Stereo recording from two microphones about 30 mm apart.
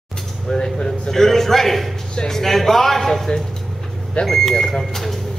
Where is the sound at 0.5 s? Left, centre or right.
Left.